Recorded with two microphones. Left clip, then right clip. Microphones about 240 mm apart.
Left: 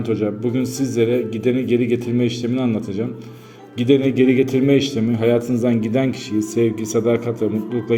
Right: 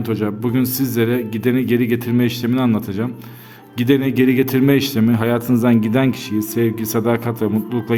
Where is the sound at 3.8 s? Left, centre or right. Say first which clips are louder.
Left 1 dB; right.